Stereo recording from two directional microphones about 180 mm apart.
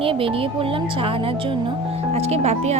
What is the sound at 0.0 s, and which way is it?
Speech, 30° right (ahead or behind).